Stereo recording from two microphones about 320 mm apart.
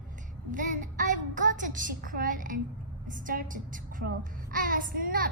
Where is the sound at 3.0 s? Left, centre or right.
Right.